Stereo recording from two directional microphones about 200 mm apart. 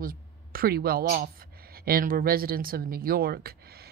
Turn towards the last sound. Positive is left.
turn(degrees=-50)  # may be behind; listen again after turning